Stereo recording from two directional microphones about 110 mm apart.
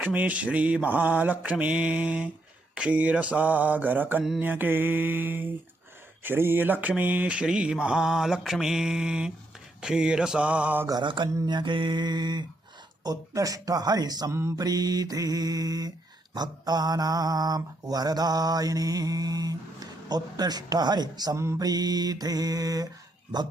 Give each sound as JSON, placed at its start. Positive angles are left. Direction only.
{"t": 0.0, "sound": "mantra", "side_deg": -15}
{"t": 4.2, "sound": "mantra", "side_deg": 0}
{"t": 4.4, "sound": "mantra", "side_deg": -20}
{"t": 10.8, "sound": "mantra", "side_deg": -45}
{"t": 21.3, "sound": "mantra", "side_deg": -25}
{"t": 21.6, "sound": "mantra", "side_deg": -35}